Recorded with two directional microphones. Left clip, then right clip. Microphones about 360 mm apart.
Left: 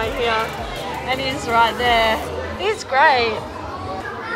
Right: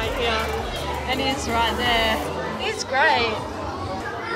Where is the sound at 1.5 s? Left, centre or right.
Centre.